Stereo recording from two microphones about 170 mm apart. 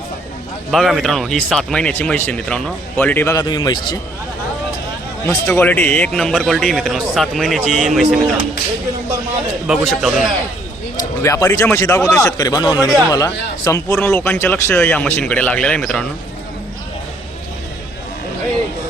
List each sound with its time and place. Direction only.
0.7 s speech: centre (ahead or behind); by 3.9 s 25° left (ahead or behind)
5.2 s speech: 15° left (ahead or behind)
9.6 s speech: centre (ahead or behind)
11.2 s speech: 15° left (ahead or behind)